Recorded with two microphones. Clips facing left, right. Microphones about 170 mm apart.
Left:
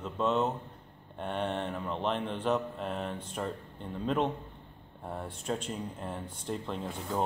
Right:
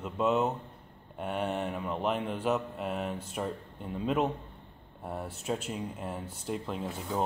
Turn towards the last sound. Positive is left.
turn(degrees=-5)  # may be behind; listen again after turning